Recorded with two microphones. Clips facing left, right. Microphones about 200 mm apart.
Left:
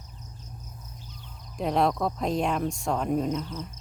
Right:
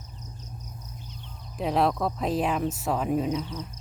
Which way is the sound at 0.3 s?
20° right (ahead or behind).